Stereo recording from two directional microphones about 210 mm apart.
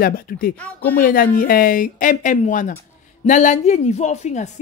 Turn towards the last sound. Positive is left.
turn(degrees=35)  # may be behind; listen again after turning